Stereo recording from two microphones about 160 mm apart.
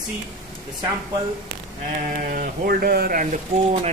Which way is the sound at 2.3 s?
65° right (ahead or behind).